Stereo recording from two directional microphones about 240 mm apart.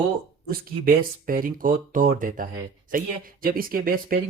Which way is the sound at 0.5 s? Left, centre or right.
Right.